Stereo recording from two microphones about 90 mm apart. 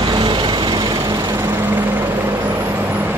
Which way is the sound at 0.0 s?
55° right (ahead or behind).